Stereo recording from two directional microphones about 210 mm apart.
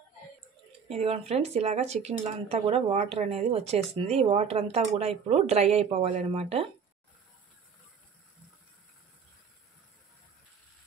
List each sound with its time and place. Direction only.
0.8 s speech: 30° right (ahead or behind)